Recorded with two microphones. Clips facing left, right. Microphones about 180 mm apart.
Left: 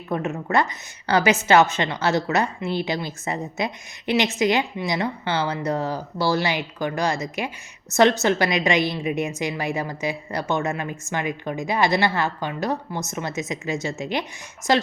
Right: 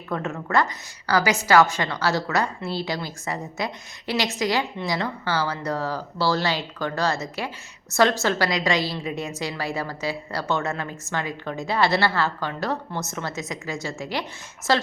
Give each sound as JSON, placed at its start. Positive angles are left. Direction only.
{"t": 0.1, "sound": "a woman's voice", "side_deg": 20}